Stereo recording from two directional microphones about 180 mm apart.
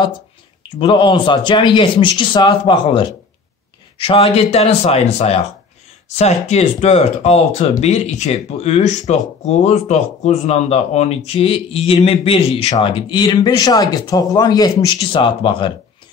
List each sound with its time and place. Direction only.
0.7 s a man's voice: 25° left (ahead or behind)